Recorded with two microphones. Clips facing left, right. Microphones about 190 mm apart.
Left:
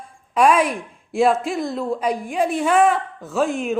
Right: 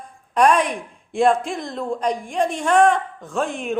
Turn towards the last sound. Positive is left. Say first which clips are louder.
# left 3 dB
turn(degrees=0)  # may be behind; listen again after turning